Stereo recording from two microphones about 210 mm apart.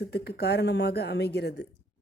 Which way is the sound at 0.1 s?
50° left (ahead or behind).